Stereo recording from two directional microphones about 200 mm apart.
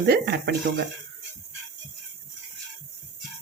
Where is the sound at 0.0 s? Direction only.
55° right (ahead or behind).